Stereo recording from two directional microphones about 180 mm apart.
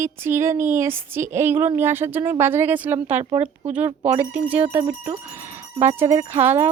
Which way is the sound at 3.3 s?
35° right (ahead or behind).